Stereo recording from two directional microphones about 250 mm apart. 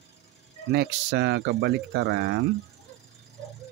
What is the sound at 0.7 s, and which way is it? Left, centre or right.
Speech, right.